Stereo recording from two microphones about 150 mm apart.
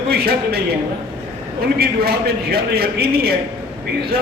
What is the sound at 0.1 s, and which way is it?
Speech, 90° right.